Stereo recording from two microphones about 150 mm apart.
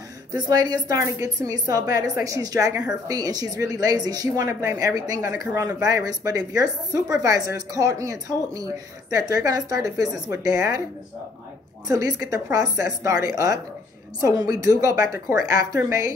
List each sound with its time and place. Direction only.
0.3 s a woman's voice: 25° right (ahead or behind)
11.9 s a woman's voice: 25° right (ahead or behind)